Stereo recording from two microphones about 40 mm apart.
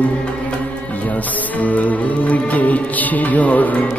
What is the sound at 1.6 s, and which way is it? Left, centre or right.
Music, left.